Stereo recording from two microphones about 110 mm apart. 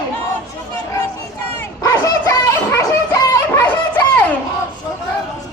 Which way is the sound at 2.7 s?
25° left (ahead or behind).